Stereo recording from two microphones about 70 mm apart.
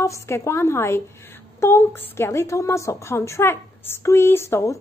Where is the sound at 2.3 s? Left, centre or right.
Left.